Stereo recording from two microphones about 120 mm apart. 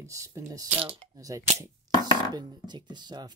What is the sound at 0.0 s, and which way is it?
Speech, 25° right (ahead or behind).